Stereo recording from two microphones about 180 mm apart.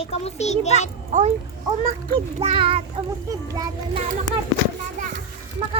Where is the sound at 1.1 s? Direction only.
40° right (ahead or behind).